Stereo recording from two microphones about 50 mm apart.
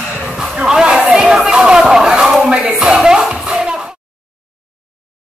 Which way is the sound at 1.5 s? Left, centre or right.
Centre.